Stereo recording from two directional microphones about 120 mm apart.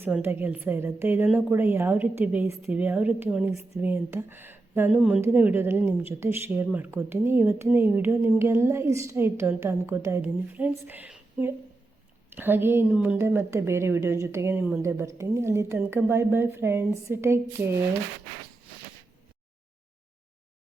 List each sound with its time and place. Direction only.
0.0 s a woman's voice: 20° right (ahead or behind)
13.1 s a woman's voice: 20° right (ahead or behind)